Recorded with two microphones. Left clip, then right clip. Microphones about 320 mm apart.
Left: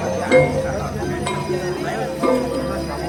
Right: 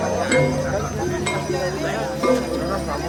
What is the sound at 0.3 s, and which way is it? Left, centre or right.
Music, centre.